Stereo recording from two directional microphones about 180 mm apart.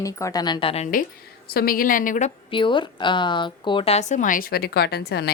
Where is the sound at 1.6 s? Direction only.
50° left (ahead or behind).